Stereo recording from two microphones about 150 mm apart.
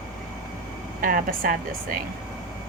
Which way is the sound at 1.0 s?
70° right (ahead or behind).